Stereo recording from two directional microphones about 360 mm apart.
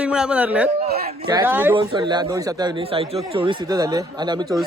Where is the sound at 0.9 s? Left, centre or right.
Right.